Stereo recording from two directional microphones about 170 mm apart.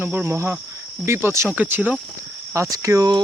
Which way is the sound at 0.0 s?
10° right (ahead or behind).